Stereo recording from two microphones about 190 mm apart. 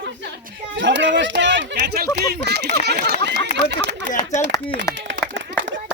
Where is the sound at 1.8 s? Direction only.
55° right (ahead or behind).